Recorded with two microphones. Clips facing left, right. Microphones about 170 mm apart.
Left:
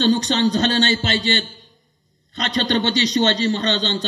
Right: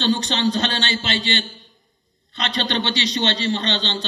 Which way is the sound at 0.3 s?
45° left (ahead or behind).